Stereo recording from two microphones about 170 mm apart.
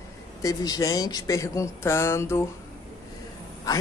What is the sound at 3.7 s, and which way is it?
Speech, 20° left (ahead or behind).